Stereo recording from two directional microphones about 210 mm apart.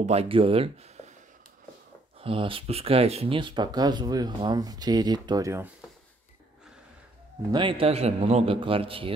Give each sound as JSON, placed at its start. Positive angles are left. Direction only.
{"t": 0.0, "sound": "speech", "side_deg": -30}
{"t": 2.2, "sound": "speech", "side_deg": -25}
{"t": 7.5, "sound": "speech", "side_deg": -25}